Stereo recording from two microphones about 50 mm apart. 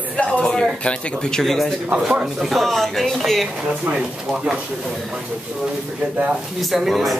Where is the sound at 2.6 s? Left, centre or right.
Centre.